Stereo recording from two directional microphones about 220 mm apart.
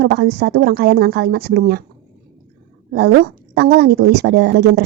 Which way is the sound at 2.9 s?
50° right (ahead or behind).